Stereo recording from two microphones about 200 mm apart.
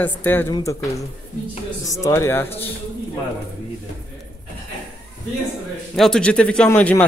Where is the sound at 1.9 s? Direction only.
15° left (ahead or behind).